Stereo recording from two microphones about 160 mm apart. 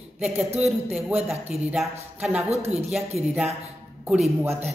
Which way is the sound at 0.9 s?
5° right (ahead or behind).